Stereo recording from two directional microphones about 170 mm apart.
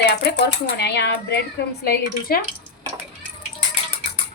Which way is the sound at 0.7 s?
80° left.